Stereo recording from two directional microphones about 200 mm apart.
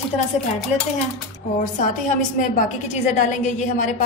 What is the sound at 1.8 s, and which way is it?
A woman's voice, 40° left (ahead or behind).